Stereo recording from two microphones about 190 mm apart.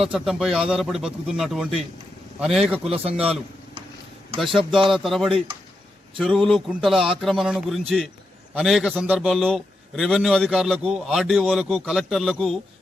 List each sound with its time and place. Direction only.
0.0 s a man's voice: centre (ahead or behind)
3.0 s a man's voice: 30° right (ahead or behind)
4.4 s a man's voice: centre (ahead or behind)